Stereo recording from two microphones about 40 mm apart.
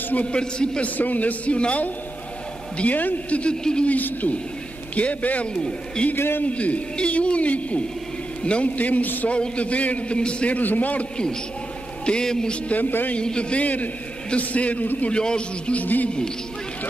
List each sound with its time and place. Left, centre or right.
0.3 s a man's voice: left
0.8 s speech: left
2.8 s a man's voice: left
5.5 s a man's voice: left
6.1 s a man's voice: left
6.4 s a man's voice: left
8.7 s a man's voice: left
9.3 s speech: left
10.5 s speech: left
12.1 s a man's voice: centre
12.7 s a man's voice: left
13.2 s a man's voice: left
15.7 s a man's voice: left